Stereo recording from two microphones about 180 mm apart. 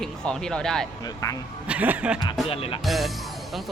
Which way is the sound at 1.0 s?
20° left (ahead or behind).